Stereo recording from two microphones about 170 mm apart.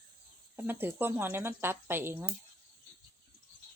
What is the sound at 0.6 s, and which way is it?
Speech, 15° right (ahead or behind).